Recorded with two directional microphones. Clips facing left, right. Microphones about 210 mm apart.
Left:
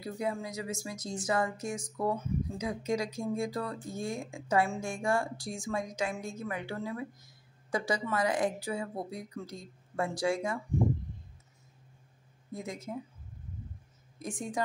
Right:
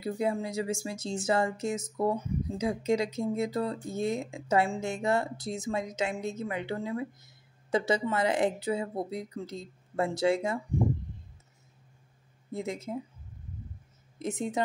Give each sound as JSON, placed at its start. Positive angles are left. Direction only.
{"t": 0.0, "sound": "speech", "side_deg": -25}
{"t": 12.5, "sound": "speech", "side_deg": -25}
{"t": 14.1, "sound": "speech", "side_deg": -25}